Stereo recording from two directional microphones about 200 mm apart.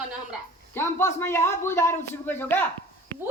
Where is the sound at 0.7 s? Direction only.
10° left (ahead or behind).